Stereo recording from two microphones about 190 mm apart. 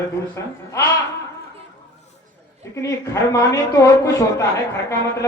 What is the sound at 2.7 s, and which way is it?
A woman's voice, 15° left (ahead or behind).